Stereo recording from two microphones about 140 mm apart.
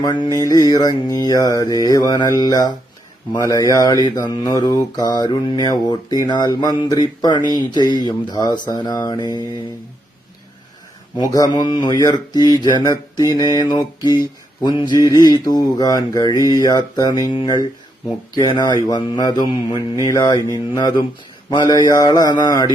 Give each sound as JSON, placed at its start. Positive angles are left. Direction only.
{"t": 0.0, "sound": "mantra", "side_deg": 30}
{"t": 7.7, "sound": "speech", "side_deg": 30}
{"t": 8.0, "sound": "mantra", "side_deg": 30}
{"t": 11.2, "sound": "mantra", "side_deg": 25}
{"t": 18.3, "sound": "speech", "side_deg": 30}
{"t": 20.1, "sound": "mantra", "side_deg": 25}